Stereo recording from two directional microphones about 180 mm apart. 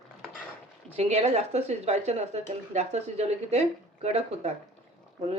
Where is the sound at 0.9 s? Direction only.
35° right (ahead or behind).